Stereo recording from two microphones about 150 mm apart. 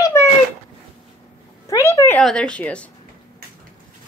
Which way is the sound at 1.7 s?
20° left (ahead or behind).